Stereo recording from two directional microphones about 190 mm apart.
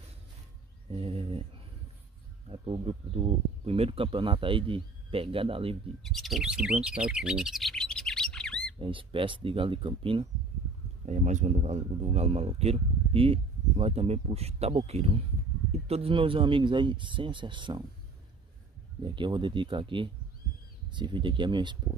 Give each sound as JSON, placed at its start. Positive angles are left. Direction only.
{"t": 0.9, "sound": "speech", "side_deg": -30}
{"t": 6.0, "sound": "speech", "side_deg": 0}
{"t": 8.7, "sound": "speech", "side_deg": -25}
{"t": 11.1, "sound": "speech", "side_deg": -40}
{"t": 19.0, "sound": "speech", "side_deg": -25}